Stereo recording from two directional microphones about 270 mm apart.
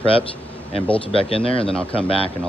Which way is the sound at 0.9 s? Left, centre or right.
Left.